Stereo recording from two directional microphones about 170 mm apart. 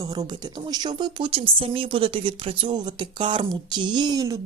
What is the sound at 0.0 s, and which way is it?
A woman's voice, 25° right (ahead or behind).